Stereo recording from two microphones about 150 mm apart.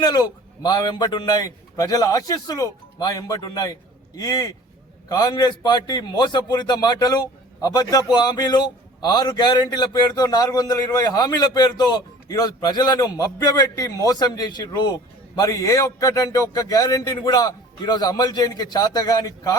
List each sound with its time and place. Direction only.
0.0 s a man's voice: 25° left (ahead or behind)